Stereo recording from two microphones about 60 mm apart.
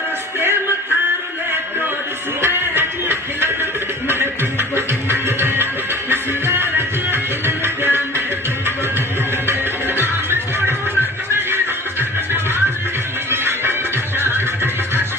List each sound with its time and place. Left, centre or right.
2.4 s music: right
9.5 s music: right
14.2 s a sound: right